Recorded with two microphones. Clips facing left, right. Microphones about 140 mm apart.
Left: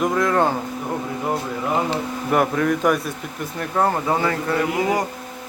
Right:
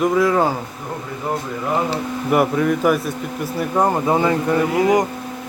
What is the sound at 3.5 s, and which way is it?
Speech, 15° right (ahead or behind).